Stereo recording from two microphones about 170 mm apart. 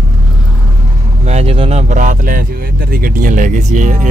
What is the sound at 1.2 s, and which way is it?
Speech, 40° right (ahead or behind).